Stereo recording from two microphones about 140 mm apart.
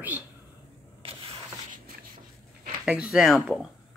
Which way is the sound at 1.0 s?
45° right (ahead or behind).